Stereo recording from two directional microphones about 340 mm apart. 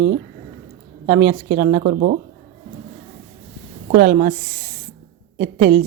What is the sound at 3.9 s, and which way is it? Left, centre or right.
Speech, right.